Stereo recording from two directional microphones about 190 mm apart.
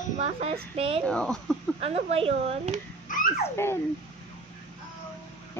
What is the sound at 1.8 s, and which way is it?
Speech, 35° right (ahead or behind).